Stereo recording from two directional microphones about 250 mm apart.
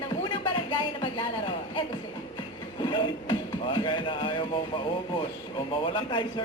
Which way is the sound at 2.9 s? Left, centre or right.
Centre.